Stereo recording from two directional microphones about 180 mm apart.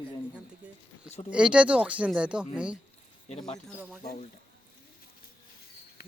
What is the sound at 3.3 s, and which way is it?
Speech, 30° left (ahead or behind).